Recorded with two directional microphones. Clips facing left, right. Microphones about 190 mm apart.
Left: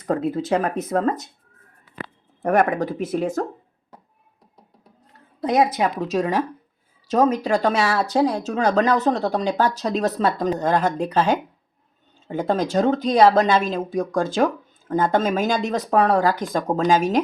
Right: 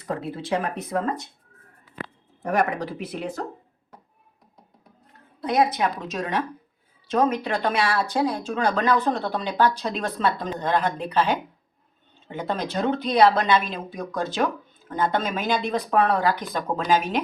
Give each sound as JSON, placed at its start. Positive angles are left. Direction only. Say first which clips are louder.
{"t": 0.1, "sound": "speech", "louder": "left 6 dB", "side_deg": 45}
{"t": 2.4, "sound": "speech", "louder": "left 5 dB", "side_deg": 55}
{"t": 5.4, "sound": "speech", "louder": "left 3 dB", "side_deg": 45}
{"t": 5.9, "sound": "speech", "louder": "left 7 dB", "side_deg": 30}
{"t": 7.1, "sound": "speech", "louder": "left 4 dB", "side_deg": 40}